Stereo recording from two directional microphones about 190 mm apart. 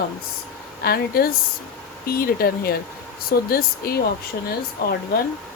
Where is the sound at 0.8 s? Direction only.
50° left (ahead or behind).